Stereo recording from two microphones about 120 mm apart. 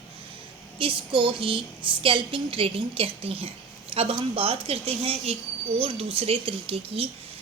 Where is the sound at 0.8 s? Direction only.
45° right (ahead or behind).